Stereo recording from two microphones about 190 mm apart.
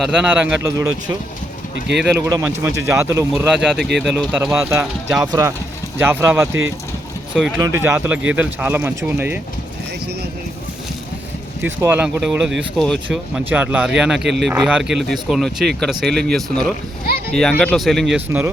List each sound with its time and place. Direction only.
0.0 s speech: 5° right (ahead or behind)
1.7 s speech: 65° right (ahead or behind)
2.2 s speech: 15° right (ahead or behind)
7.6 s speech: 15° right (ahead or behind)
11.6 s speech: 10° right (ahead or behind)